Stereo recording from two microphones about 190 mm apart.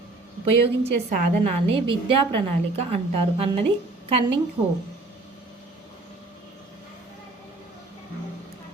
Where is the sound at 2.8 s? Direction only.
30° right (ahead or behind).